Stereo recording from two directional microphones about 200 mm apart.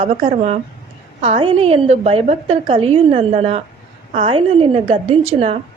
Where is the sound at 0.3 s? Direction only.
35° right (ahead or behind).